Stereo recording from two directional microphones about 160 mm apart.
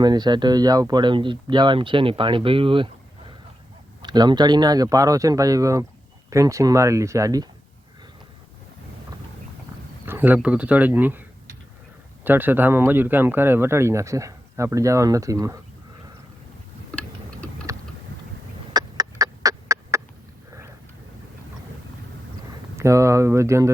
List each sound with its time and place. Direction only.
0.0 s speech: 25° right (ahead or behind)
4.0 s speech: 25° right (ahead or behind)
10.1 s speech: 10° right (ahead or behind)
12.2 s speech: 10° right (ahead or behind)
16.9 s tick-tock: 10° left (ahead or behind)
18.7 s chicken: 25° right (ahead or behind)
22.8 s speech: 20° right (ahead or behind)